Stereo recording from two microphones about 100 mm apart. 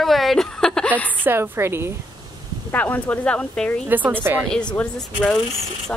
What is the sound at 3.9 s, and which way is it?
Speech, 15° right (ahead or behind).